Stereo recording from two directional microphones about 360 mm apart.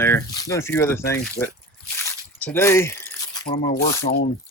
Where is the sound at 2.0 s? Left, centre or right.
Centre.